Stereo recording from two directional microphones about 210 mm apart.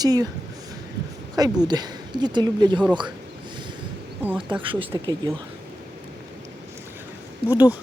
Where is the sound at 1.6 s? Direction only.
20° right (ahead or behind).